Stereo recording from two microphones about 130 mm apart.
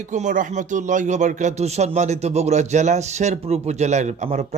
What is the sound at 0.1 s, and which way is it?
Speech, 70° right (ahead or behind).